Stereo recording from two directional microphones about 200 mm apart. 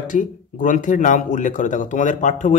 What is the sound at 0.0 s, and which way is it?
A man's voice, 40° left (ahead or behind).